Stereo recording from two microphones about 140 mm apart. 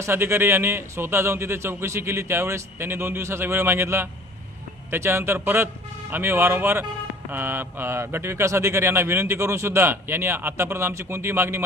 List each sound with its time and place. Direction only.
0.0 s speech: 20° right (ahead or behind)